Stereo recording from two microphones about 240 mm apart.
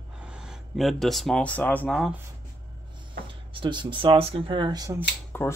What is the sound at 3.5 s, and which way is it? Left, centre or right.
Speech, centre.